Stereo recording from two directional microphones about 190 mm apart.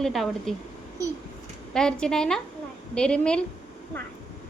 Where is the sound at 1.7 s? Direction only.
5° left (ahead or behind).